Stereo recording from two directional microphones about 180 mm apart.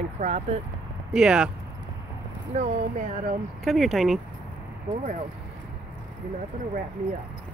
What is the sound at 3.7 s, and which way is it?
Speech, centre (ahead or behind).